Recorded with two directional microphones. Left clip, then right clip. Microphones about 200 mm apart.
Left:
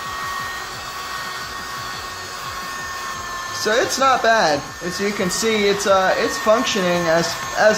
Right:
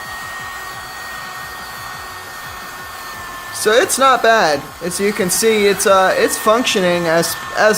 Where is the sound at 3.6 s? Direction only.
35° right (ahead or behind).